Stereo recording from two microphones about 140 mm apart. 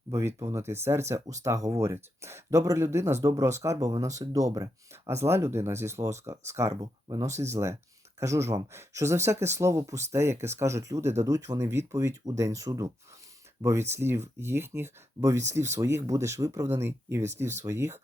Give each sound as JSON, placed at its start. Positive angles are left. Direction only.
{"t": 0.1, "sound": "speech", "side_deg": -20}